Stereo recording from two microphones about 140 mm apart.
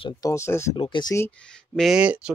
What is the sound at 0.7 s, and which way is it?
Speech, 35° left (ahead or behind).